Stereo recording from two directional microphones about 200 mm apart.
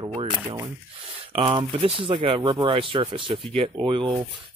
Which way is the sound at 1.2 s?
25° right (ahead or behind).